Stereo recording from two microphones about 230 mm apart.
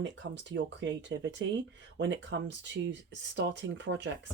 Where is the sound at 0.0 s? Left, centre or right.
Right.